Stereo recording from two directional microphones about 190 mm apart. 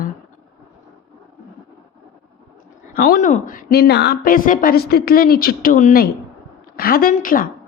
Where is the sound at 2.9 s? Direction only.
50° left (ahead or behind).